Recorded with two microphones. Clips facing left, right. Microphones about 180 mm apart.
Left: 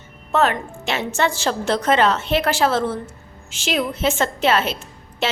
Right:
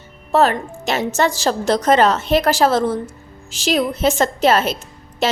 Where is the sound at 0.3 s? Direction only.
35° right (ahead or behind).